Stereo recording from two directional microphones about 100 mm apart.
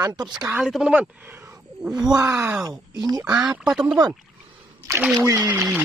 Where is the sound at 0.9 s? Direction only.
15° right (ahead or behind).